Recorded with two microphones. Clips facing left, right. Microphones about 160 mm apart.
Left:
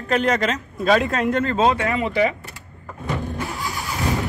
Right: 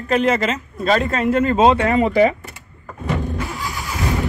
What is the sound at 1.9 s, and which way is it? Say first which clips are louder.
Speech: right 6 dB; 40° right (ahead or behind).